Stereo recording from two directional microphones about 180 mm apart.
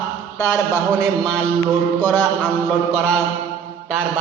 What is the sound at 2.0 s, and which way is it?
Mantra, 10° left (ahead or behind).